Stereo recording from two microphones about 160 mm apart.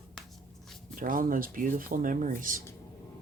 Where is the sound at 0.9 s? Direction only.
60° right (ahead or behind).